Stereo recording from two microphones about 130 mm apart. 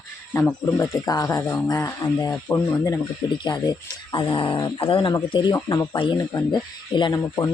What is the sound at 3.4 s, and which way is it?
Speech, 35° left (ahead or behind).